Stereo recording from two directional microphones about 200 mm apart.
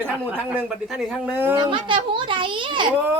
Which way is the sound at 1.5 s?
20° right (ahead or behind).